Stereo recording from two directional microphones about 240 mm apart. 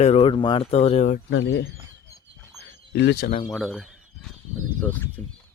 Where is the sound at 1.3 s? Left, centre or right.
Left.